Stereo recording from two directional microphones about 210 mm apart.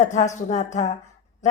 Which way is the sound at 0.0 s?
35° left (ahead or behind).